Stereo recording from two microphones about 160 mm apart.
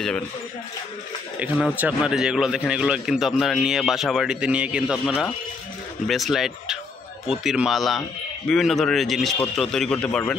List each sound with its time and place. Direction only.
1.4 s a man's voice: 10° right (ahead or behind); by 10.3 s 5° left (ahead or behind)